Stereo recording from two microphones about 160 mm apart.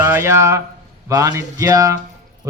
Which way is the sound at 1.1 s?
20° right (ahead or behind).